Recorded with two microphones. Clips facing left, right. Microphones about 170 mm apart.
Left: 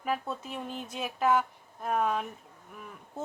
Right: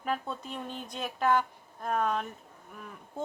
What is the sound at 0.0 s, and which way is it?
A woman's voice, 5° left (ahead or behind).